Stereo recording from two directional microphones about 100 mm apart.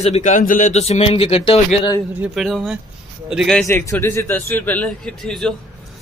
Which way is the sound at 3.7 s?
30° left (ahead or behind).